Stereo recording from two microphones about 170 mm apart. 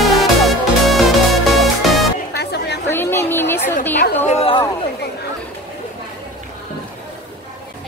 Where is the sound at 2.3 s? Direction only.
75° left (ahead or behind).